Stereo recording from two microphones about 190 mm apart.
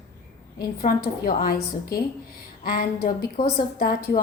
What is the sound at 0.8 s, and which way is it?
A woman's voice, 45° left (ahead or behind).